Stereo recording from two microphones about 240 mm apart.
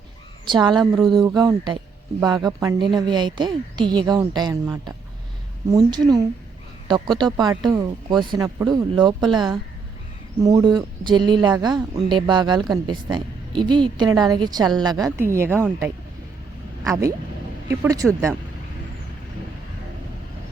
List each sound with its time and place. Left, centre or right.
0.4 s a woman's voice: centre